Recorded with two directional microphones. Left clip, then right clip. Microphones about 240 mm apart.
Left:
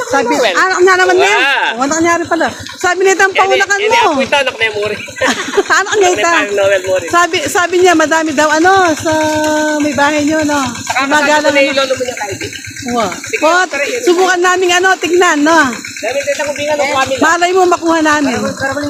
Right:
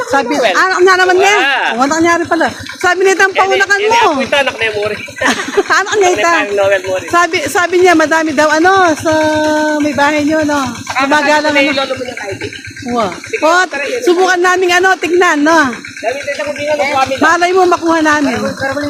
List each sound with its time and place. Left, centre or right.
0.5 s speech: centre
1.4 s speech: left
1.8 s speech: centre
4.3 s speech: left
5.2 s speech: centre
6.4 s speech: left
7.1 s speech: centre
11.5 s a man's voice: left
13.4 s speech: centre
17.2 s speech: centre